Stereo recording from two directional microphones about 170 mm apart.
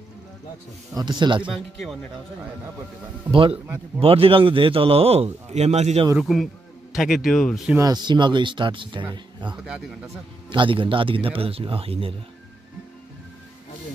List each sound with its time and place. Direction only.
0.9 s speech: 25° right (ahead or behind)
1.4 s speech: centre (ahead or behind)
3.3 s a man's voice: 30° right (ahead or behind)
6.1 s speech: centre (ahead or behind)
7.7 s a man's voice: 20° right (ahead or behind)